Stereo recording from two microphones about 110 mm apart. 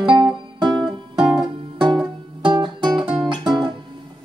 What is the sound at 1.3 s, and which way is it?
Music, 40° right (ahead or behind).